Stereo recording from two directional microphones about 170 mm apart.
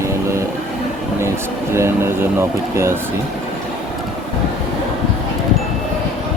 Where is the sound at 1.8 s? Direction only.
15° right (ahead or behind).